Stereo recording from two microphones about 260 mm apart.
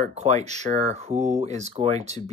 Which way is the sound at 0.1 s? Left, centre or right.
Right.